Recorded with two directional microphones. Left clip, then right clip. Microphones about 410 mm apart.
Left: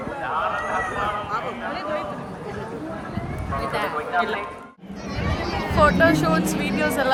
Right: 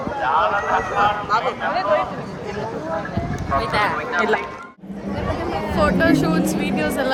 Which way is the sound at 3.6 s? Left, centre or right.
Right.